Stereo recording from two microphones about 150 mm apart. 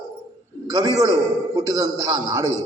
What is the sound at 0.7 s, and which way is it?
Speech, 25° right (ahead or behind).